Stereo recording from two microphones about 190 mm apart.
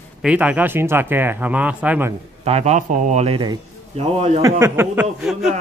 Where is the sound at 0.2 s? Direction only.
5° right (ahead or behind).